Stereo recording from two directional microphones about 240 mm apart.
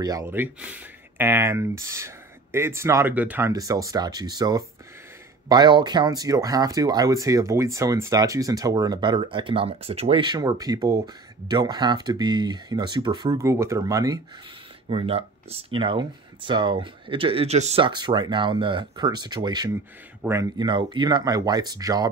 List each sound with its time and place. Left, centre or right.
0.0 s speech: centre